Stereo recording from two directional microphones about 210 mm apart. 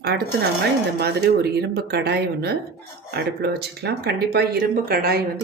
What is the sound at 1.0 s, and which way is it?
Speech, 50° right (ahead or behind).